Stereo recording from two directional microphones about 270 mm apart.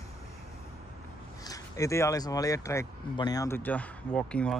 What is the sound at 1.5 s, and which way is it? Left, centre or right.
Speech, centre.